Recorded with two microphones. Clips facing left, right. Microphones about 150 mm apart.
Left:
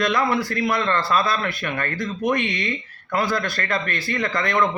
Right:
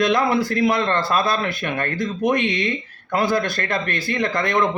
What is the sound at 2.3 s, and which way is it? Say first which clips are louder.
Speech: right 2 dB; 55° right (ahead or behind).